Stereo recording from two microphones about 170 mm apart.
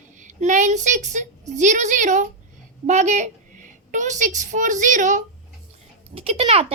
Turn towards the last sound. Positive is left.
turn(degrees=-35)  # may be behind; listen again after turning